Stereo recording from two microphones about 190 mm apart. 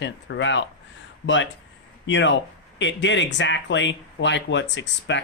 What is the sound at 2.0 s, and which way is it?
Speech, 75° left (ahead or behind).